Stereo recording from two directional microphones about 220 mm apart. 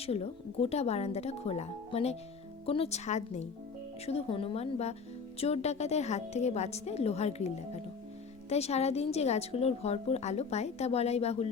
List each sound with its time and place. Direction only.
0.0 s a woman's voice: 25° left (ahead or behind)